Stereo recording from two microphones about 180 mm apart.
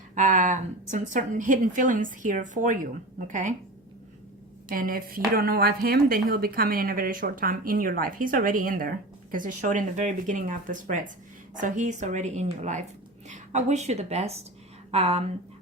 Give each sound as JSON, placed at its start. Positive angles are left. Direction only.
{"t": 0.1, "sound": "speech", "side_deg": -45}
{"t": 4.7, "sound": "a woman's voice", "side_deg": -50}